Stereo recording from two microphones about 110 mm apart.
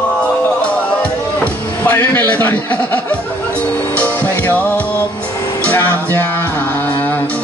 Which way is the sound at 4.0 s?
15° left (ahead or behind).